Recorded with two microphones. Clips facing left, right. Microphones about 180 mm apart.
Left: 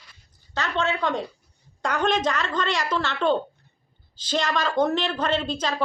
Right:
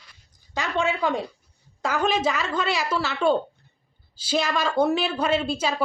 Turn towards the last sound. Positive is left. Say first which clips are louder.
# right 1 dB
turn(degrees=-10)  # may be behind; listen again after turning